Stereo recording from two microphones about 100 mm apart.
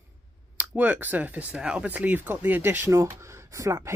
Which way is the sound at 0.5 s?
15° right (ahead or behind).